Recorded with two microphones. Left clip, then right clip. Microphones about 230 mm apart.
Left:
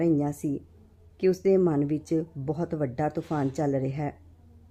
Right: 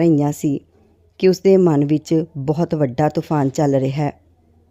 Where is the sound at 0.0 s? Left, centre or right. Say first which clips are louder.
Right 9 dB; right.